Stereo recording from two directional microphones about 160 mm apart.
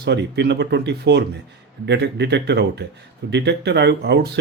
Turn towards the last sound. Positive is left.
turn(degrees=-90)